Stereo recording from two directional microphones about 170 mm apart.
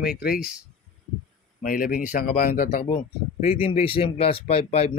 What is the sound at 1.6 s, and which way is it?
Speech, 55° left (ahead or behind).